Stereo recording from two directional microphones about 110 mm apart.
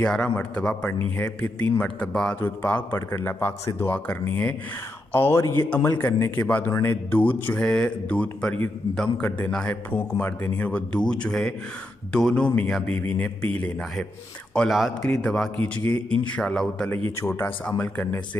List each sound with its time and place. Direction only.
0.0 s speech: 10° left (ahead or behind)
9.8 s speech: 20° left (ahead or behind)
17.2 s speech: 20° left (ahead or behind)